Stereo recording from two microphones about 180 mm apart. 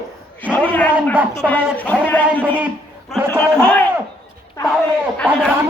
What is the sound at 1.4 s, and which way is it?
Speech, 10° left (ahead or behind).